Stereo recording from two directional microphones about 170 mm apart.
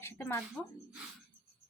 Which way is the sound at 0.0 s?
15° left (ahead or behind).